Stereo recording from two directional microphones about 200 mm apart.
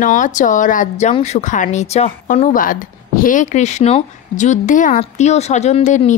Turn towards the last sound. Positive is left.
turn(degrees=35)  # may be behind; listen again after turning